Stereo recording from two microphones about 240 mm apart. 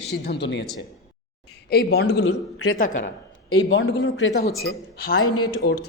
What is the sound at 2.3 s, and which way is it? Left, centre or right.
Speech, left.